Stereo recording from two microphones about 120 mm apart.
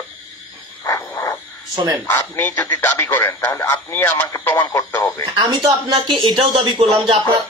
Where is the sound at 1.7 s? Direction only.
40° right (ahead or behind).